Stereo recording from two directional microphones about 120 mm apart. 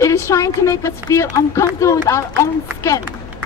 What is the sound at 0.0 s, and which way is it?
A woman's voice, 25° left (ahead or behind).